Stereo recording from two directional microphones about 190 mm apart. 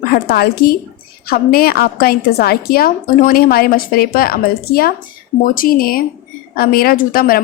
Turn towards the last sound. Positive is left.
turn(degrees=50)  # may be behind; listen again after turning